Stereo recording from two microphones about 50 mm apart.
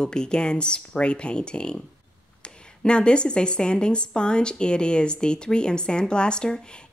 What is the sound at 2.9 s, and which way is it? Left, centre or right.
Speech, centre.